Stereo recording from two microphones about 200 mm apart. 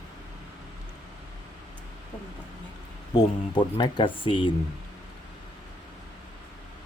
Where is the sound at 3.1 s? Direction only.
25° left (ahead or behind).